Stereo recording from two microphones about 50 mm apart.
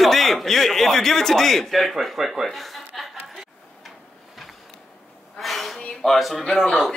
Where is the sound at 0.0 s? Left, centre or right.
Centre.